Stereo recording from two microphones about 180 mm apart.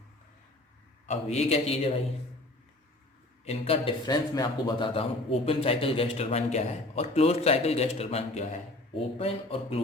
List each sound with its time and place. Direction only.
1.0 s a man's voice: 40° left (ahead or behind)
3.4 s a man's voice: 35° left (ahead or behind)